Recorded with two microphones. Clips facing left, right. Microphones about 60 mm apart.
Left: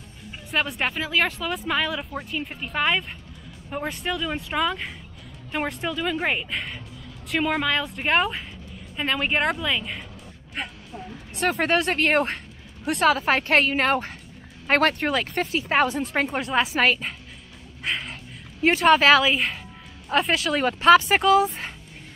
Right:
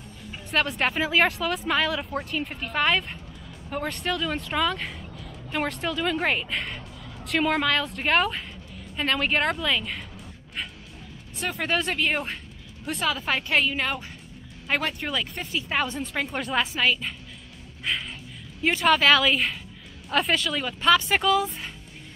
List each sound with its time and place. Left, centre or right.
0.3 s a woman's voice: centre
10.6 s music: left
10.9 s music: left
11.9 s speech: left
16.3 s speech: centre
16.7 s speech: left
17.8 s a sound: centre
18.6 s speech: left
19.1 s speech: centre
20.1 s speech: left
20.5 s speech: left
21.1 s speech: left